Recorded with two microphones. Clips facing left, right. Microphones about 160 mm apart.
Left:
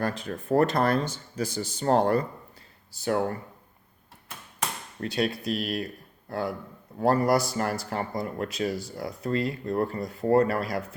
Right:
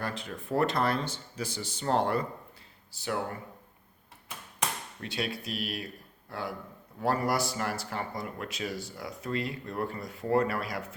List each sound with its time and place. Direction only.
0.0 s speech: 45° left (ahead or behind)
4.9 s speech: 40° left (ahead or behind)
7.0 s speech: 40° left (ahead or behind)